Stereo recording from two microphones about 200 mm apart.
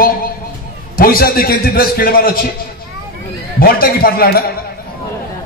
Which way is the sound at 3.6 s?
45° left (ahead or behind).